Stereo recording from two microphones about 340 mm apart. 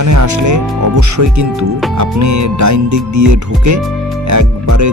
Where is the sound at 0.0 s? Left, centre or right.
Right.